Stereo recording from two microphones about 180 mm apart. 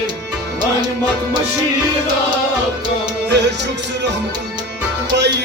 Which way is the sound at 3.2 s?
75° right (ahead or behind).